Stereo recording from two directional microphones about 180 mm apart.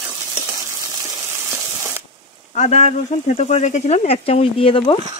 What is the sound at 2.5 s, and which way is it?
Speech, 40° left (ahead or behind).